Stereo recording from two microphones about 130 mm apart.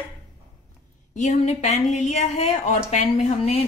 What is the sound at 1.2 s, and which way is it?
Speech, 65° left (ahead or behind).